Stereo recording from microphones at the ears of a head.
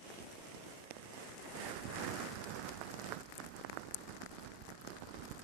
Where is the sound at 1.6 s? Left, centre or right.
Right.